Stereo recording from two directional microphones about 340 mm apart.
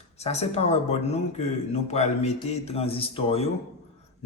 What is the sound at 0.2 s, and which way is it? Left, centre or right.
A man's voice, centre.